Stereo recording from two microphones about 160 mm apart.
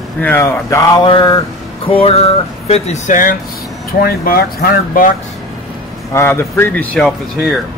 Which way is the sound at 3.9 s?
70° left (ahead or behind).